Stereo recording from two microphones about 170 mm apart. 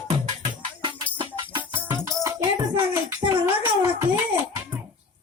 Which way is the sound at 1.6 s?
10° right (ahead or behind).